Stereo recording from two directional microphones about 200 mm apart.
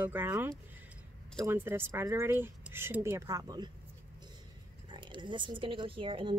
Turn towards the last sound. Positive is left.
turn(degrees=-25)  # may be behind; listen again after turning